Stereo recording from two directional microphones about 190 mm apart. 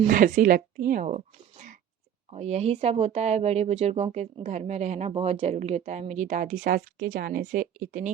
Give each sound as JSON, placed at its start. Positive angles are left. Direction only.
{"t": 0.1, "sound": "speech", "side_deg": -45}